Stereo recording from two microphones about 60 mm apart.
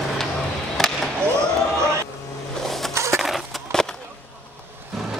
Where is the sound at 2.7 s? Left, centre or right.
Centre.